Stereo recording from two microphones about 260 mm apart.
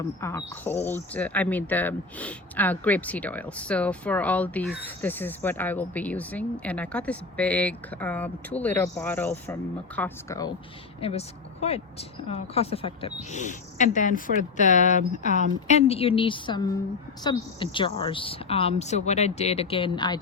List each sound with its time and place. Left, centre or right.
0.0 s speech: centre
11.0 s speech: left